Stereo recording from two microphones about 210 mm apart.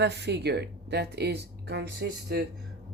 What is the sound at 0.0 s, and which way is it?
Speech, 55° right (ahead or behind).